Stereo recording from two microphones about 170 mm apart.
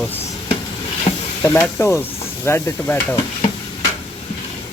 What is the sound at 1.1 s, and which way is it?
Stir, 40° left (ahead or behind).